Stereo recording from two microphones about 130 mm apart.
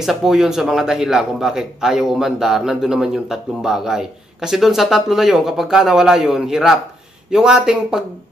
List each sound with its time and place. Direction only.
0.0 s a man's voice: centre (ahead or behind)